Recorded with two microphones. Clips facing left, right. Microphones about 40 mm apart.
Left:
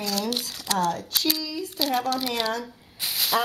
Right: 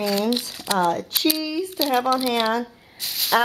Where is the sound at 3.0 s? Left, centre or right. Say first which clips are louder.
Even; centre.